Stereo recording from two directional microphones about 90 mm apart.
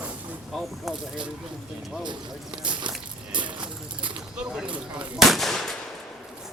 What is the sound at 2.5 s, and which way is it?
Speech, 60° right (ahead or behind).